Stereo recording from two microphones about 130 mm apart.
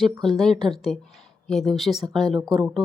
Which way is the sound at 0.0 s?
Centre (ahead or behind).